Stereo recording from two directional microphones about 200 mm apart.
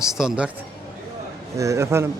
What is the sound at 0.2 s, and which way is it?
Speech, 5° right (ahead or behind).